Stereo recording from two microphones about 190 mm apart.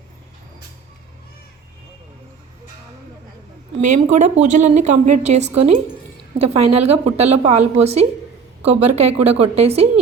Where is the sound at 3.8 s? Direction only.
40° right (ahead or behind).